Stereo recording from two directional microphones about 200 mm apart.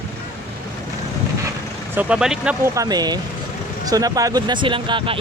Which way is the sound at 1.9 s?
5° right (ahead or behind).